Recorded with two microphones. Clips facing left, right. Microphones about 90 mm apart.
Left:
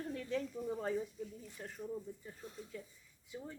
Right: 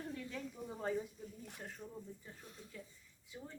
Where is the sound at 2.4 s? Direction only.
30° left (ahead or behind).